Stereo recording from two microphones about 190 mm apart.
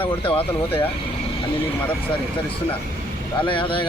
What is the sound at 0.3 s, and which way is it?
Speech, 30° left (ahead or behind).